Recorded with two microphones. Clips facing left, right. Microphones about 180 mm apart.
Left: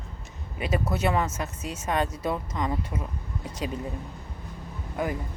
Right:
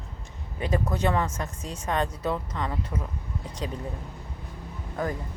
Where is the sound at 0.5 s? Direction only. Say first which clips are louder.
Even; 10° left (ahead or behind).